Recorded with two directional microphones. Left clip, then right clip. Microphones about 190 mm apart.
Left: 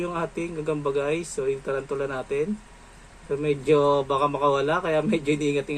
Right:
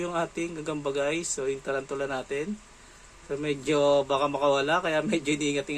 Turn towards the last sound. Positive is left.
turn(degrees=-15)  # may be behind; listen again after turning